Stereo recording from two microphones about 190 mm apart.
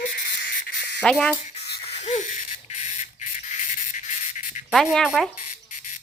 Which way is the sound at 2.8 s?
40° left (ahead or behind).